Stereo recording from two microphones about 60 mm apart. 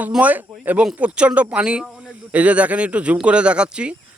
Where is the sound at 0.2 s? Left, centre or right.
Right.